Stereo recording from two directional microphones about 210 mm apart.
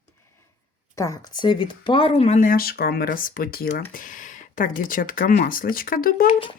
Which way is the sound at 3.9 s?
40° left (ahead or behind).